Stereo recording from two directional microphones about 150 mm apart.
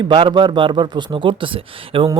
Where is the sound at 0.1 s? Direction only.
35° right (ahead or behind).